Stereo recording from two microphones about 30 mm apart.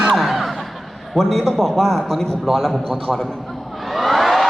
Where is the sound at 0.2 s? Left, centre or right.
Centre.